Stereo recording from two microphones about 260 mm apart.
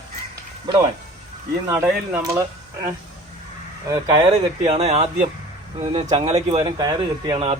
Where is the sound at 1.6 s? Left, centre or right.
Centre.